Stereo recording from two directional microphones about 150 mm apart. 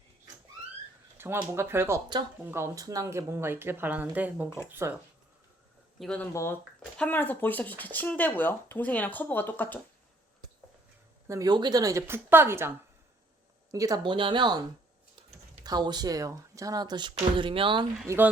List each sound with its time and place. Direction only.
1.2 s a sound: 15° right (ahead or behind)
1.5 s speech: 15° right (ahead or behind)
6.0 s speech: 5° left (ahead or behind)
6.3 s speech: 15° left (ahead or behind)
11.3 s speech: 25° right (ahead or behind)
15.6 s speech: 30° right (ahead or behind)
18.0 s speech: 20° right (ahead or behind)